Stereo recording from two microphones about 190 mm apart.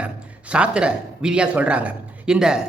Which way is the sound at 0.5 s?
5° right (ahead or behind).